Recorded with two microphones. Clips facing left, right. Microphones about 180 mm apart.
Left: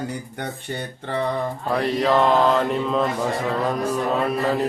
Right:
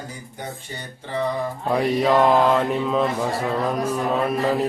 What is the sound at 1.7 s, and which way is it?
Mantra, 10° right (ahead or behind).